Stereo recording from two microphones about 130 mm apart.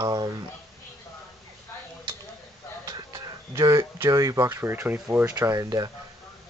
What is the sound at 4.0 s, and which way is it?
Speech, 25° right (ahead or behind).